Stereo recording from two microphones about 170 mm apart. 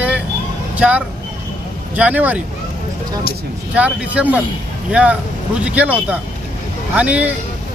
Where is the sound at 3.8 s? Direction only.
10° right (ahead or behind).